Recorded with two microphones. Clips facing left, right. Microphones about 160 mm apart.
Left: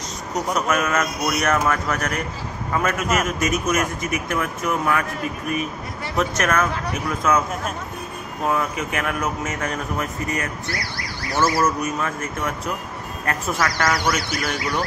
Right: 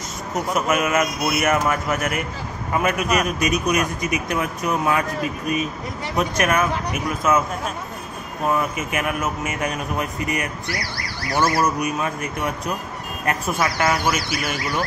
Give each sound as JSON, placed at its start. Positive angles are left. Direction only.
{"t": 0.6, "sound": "speech", "side_deg": -5}
{"t": 6.1, "sound": "speech", "side_deg": -15}
{"t": 11.6, "sound": "speech", "side_deg": -15}